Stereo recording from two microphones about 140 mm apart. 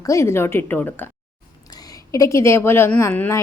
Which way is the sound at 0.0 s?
20° left (ahead or behind).